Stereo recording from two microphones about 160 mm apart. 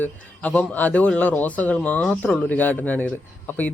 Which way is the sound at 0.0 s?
10° left (ahead or behind).